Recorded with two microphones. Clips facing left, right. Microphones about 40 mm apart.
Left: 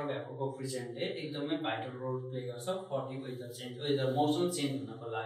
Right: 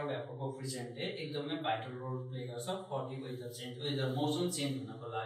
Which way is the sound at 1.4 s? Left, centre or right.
Centre.